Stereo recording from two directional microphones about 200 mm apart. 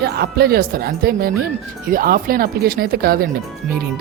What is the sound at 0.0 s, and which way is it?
Speech, 50° right (ahead or behind).